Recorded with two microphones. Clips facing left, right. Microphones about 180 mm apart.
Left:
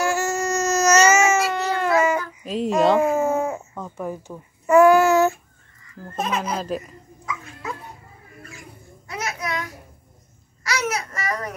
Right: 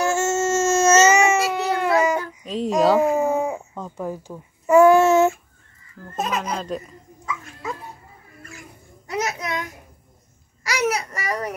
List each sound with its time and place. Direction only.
0.0 s baby cry: 25° right (ahead or behind)
1.1 s baby cry: centre (ahead or behind)
1.6 s a sound: 10° right (ahead or behind)
2.4 s a sound: centre (ahead or behind)
3.3 s baby cry: 15° right (ahead or behind)
4.3 s a child's voice: 5° right (ahead or behind)
4.8 s child singing: 25° right (ahead or behind)
6.1 s a child's voice: 5° left (ahead or behind)
9.3 s a sound: 20° right (ahead or behind)